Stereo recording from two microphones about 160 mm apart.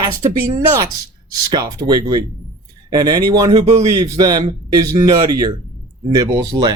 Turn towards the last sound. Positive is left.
turn(degrees=-20)  # may be behind; listen again after turning